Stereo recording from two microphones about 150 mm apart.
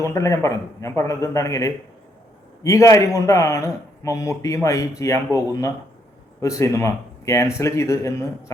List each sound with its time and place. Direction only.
0.0 s speech: 20° left (ahead or behind)